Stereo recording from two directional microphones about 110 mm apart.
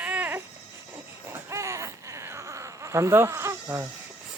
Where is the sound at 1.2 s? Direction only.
25° right (ahead or behind).